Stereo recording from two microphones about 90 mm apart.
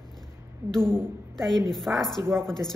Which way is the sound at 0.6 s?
30° right (ahead or behind).